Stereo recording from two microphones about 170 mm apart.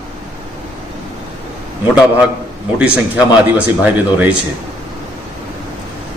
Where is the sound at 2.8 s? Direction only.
10° right (ahead or behind).